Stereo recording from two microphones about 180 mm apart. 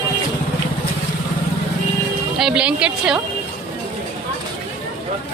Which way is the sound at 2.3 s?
5° right (ahead or behind).